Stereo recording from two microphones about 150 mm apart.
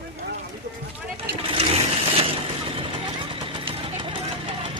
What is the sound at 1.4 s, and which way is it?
Vehicle, 40° right (ahead or behind).